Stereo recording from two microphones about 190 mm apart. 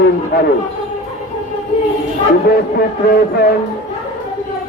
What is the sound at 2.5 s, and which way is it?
Speech, 60° left (ahead or behind).